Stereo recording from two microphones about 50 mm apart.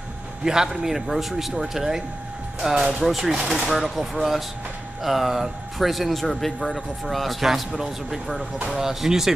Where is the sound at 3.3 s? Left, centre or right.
Centre.